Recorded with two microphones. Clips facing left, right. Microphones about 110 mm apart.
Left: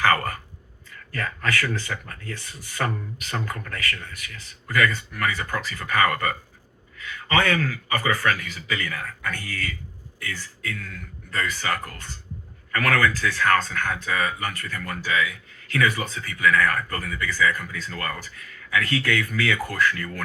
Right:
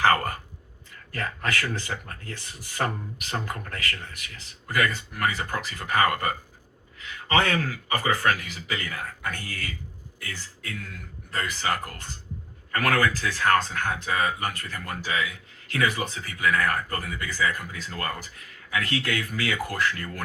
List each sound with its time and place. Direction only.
0.0 s whispering: 30° right (ahead or behind)
1.1 s speech: 30° right (ahead or behind)
18.7 s speech: 25° right (ahead or behind)